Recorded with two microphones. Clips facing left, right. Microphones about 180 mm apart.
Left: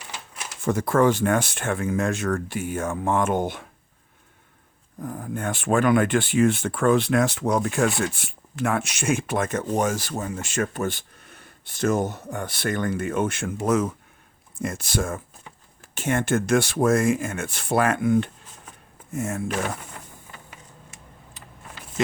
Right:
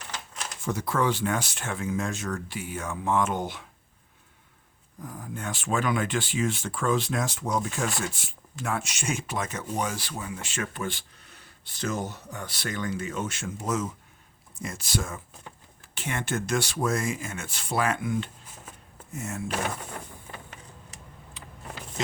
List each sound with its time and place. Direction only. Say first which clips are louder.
0.6 s speech: left 7 dB; 50° left (ahead or behind)
4.9 s speech: left 7 dB; 55° left (ahead or behind)
21.4 s a sound: right 2 dB; 40° left (ahead or behind)